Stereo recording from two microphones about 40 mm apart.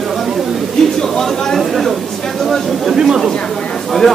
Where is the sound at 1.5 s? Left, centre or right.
Centre.